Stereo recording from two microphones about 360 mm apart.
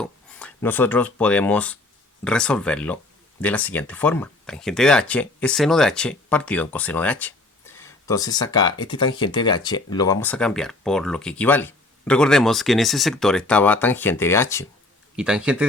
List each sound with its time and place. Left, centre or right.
0.0 s speech: centre